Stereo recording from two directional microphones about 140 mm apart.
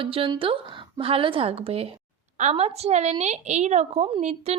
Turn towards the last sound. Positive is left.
turn(degrees=-50)  # may be behind; listen again after turning